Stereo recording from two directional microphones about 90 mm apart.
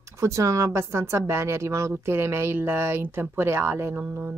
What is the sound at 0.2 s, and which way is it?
A woman's voice, 35° right (ahead or behind).